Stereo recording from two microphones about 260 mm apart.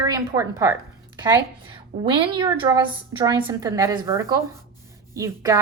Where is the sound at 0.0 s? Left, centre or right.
Centre.